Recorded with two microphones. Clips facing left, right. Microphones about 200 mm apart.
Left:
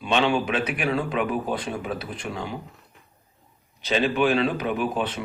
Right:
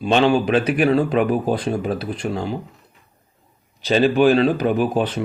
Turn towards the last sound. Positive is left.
turn(degrees=-40)  # may be behind; listen again after turning